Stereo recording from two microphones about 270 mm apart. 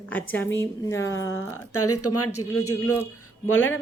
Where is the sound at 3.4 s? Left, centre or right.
Left.